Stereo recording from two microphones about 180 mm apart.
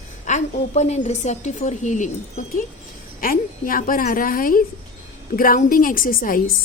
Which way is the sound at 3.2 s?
50° left (ahead or behind).